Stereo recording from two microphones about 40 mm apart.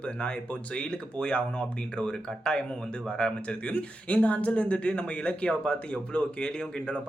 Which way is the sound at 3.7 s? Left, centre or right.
Left.